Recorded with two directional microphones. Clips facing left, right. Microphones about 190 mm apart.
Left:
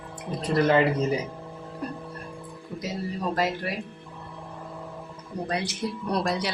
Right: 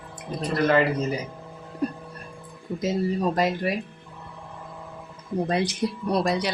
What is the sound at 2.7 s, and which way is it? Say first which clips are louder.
Speech: right 7 dB; 40° right (ahead or behind).